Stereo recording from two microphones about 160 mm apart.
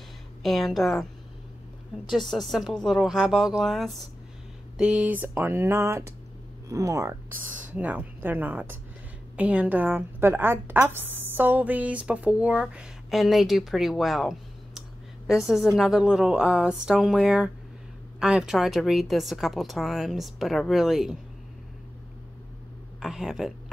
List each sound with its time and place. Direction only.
0.4 s speech: centre (ahead or behind)
2.0 s a woman's voice: centre (ahead or behind)
22.9 s speech: 5° right (ahead or behind)